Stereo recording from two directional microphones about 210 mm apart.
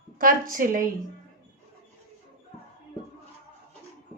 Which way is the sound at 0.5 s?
40° right (ahead or behind).